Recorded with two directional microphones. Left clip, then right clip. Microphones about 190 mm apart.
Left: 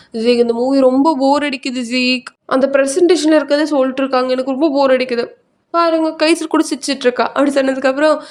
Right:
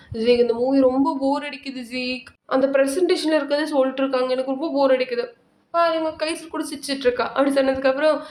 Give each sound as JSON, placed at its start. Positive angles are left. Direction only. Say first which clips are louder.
{"t": 0.1, "sound": "speech", "louder": "left 5 dB", "side_deg": 40}